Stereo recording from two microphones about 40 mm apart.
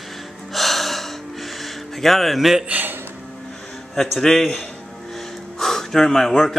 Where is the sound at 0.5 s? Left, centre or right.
Centre.